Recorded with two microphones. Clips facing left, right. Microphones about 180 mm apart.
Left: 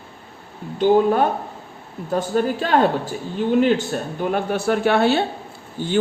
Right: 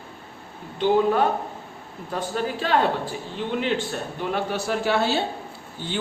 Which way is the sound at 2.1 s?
45° left (ahead or behind).